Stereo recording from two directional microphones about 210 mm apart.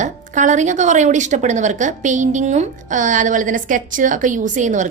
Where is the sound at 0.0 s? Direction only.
35° right (ahead or behind).